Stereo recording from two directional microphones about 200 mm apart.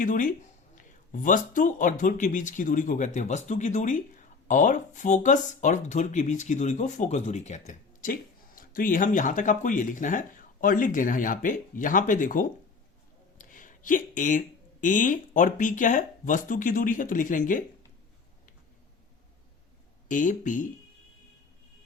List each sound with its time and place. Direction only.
0.0 s speech: 40° left (ahead or behind)
20.1 s speech: 40° left (ahead or behind)